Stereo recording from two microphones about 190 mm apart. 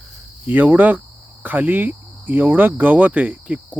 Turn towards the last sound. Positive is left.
turn(degrees=-10)  # may be behind; listen again after turning